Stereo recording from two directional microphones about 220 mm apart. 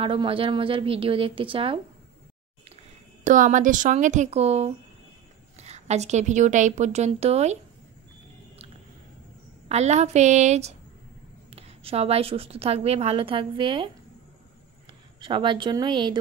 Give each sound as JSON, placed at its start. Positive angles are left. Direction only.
{"t": 0.0, "sound": "a woman's voice", "side_deg": -25}
{"t": 3.3, "sound": "a woman's voice", "side_deg": -35}
{"t": 9.7, "sound": "a woman's voice", "side_deg": -30}
{"t": 14.9, "sound": "speech", "side_deg": -20}